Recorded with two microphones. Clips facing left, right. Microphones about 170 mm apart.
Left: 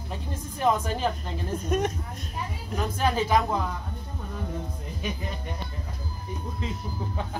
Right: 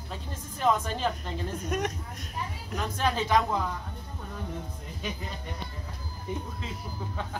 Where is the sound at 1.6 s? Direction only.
25° left (ahead or behind).